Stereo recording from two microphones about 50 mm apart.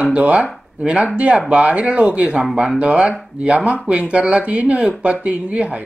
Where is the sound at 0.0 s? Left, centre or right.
Right.